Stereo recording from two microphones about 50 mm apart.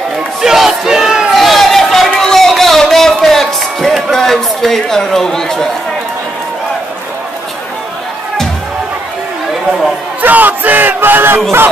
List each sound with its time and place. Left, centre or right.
0.4 s battle cry: centre
1.3 s a sound: centre
2.1 s music: centre
10.2 s battle cry: right